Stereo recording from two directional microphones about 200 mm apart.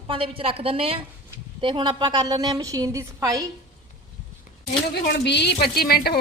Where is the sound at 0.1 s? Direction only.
25° right (ahead or behind).